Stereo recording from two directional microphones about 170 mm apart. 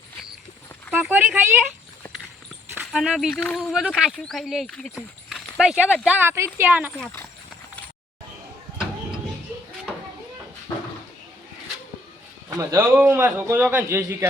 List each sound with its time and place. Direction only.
0.9 s a sound: centre (ahead or behind)
1.1 s a man's voice: 10° right (ahead or behind)
2.8 s speech: centre (ahead or behind)
6.1 s a man's voice: 10° right (ahead or behind)
12.5 s a man's voice: 15° right (ahead or behind)